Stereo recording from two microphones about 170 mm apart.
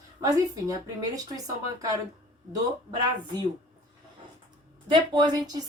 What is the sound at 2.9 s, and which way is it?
Speech, 25° right (ahead or behind).